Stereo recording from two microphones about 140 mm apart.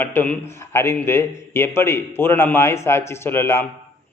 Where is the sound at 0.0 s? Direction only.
15° left (ahead or behind).